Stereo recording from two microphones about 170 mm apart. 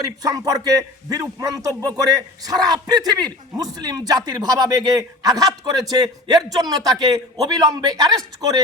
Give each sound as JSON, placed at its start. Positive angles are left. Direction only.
{"t": 0.0, "sound": "speech", "side_deg": -20}